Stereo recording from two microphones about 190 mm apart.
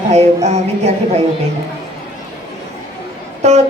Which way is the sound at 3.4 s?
35° right (ahead or behind).